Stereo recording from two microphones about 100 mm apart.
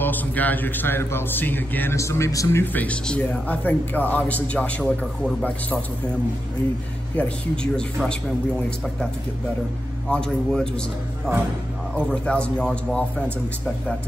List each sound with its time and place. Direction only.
0.0 s speech: 15° left (ahead or behind)
2.0 s speech: 30° left (ahead or behind)
2.6 s speech: 15° left (ahead or behind)
7.2 s speech: 10° left (ahead or behind)